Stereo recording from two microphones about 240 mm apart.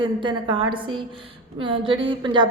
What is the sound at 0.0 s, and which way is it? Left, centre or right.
Speech, centre.